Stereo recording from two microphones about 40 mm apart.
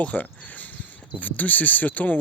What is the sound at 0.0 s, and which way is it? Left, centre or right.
Speech, left.